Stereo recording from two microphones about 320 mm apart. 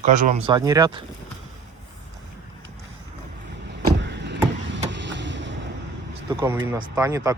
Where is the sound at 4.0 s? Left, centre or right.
Right.